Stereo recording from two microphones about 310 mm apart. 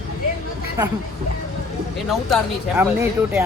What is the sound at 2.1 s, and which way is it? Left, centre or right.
Speech, centre.